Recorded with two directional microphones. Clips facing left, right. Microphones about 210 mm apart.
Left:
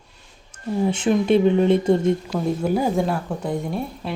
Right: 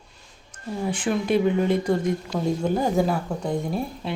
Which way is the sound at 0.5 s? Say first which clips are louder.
Left 6 dB; 25° left (ahead or behind).